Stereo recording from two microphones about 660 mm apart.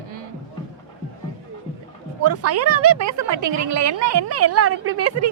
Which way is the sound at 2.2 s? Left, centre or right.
Right.